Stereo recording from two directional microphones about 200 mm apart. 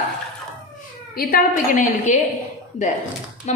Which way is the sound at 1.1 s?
45° left (ahead or behind).